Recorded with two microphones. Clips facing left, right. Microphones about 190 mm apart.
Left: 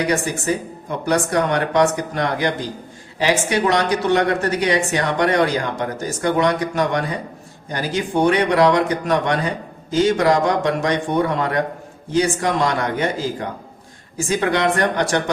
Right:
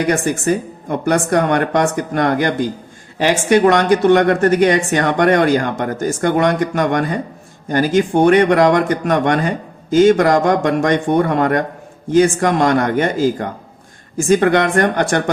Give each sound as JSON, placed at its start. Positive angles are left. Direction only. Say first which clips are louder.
{"t": 0.1, "sound": "a woman's voice", "louder": "right 4 dB", "side_deg": -50}